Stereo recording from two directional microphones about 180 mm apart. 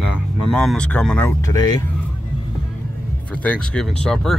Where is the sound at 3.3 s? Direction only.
5° left (ahead or behind).